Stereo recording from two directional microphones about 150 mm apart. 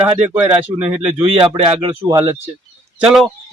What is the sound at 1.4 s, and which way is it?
Speech, 35° right (ahead or behind).